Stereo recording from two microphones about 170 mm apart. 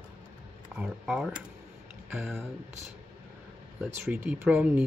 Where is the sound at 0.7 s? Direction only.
5° right (ahead or behind).